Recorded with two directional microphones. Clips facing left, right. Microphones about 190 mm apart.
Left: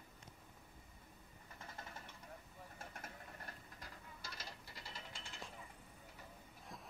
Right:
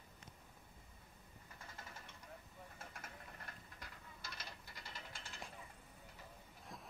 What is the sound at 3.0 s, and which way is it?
Ratchet, 35° left (ahead or behind).